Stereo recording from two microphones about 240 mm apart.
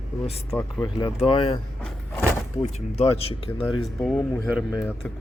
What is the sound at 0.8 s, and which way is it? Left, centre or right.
Speech, centre.